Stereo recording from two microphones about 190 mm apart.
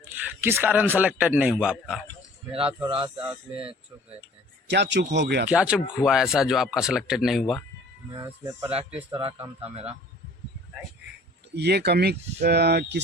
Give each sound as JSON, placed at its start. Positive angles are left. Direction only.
{"t": 0.0, "sound": "speech", "side_deg": -10}
{"t": 2.8, "sound": "speech", "side_deg": -25}
{"t": 3.2, "sound": "speech", "side_deg": -5}
{"t": 4.7, "sound": "speech", "side_deg": -65}
{"t": 5.5, "sound": "speech", "side_deg": -5}
{"t": 8.1, "sound": "speech", "side_deg": -20}
{"t": 11.5, "sound": "speech", "side_deg": -60}